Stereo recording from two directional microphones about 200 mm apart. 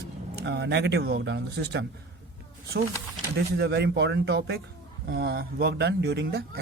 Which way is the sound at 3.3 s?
55° right (ahead or behind).